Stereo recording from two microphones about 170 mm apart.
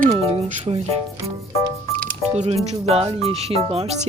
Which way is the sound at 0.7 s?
30° right (ahead or behind).